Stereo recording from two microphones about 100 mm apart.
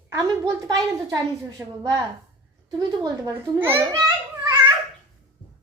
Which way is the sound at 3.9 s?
40° right (ahead or behind).